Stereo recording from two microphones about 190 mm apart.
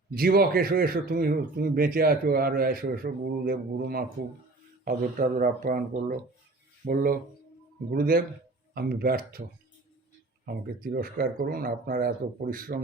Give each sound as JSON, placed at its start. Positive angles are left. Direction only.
{"t": 0.1, "sound": "speech", "side_deg": -50}
{"t": 10.4, "sound": "speech", "side_deg": -50}